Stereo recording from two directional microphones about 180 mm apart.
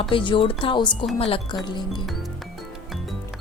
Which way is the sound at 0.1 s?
30° left (ahead or behind).